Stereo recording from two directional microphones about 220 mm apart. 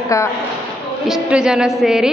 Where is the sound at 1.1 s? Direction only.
5° right (ahead or behind).